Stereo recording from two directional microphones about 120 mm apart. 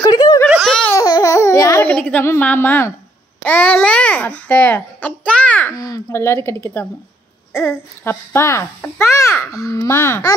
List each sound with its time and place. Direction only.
0.0 s a sound: 35° left (ahead or behind)
0.5 s laughter: centre (ahead or behind)
0.9 s babbling: 30° left (ahead or behind)
1.9 s a child's voice: 10° left (ahead or behind)
5.8 s speech: 25° left (ahead or behind)